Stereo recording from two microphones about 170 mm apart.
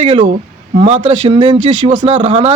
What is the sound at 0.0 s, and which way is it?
A man's voice, 30° right (ahead or behind).